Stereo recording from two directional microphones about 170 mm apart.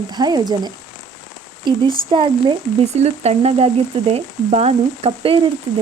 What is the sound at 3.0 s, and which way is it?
Frying, 40° right (ahead or behind).